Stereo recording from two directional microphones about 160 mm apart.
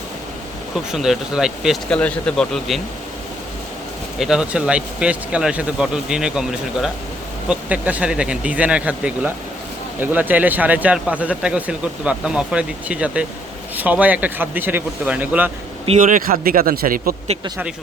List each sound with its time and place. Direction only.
0.9 s speech: centre (ahead or behind)
4.2 s speech: 5° right (ahead or behind)
16.0 s speech: 55° right (ahead or behind)